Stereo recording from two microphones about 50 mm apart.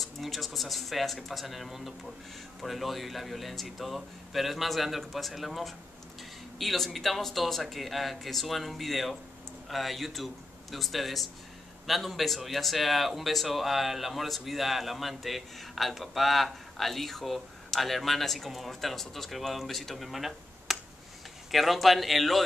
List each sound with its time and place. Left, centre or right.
0.0 s speech: centre